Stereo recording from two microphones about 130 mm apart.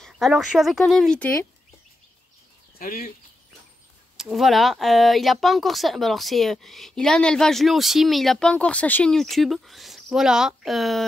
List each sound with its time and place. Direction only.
0.0 s speech: centre (ahead or behind)
2.8 s speech: 90° left
4.2 s speech: centre (ahead or behind)